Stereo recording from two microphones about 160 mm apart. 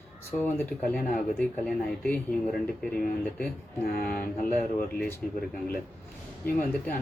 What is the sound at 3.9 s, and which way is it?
Speech, 65° left (ahead or behind).